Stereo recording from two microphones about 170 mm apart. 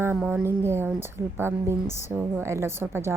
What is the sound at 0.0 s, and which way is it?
A woman's voice, 15° right (ahead or behind).